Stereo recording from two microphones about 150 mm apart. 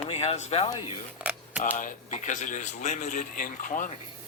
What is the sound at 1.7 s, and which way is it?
Speech, 60° left (ahead or behind).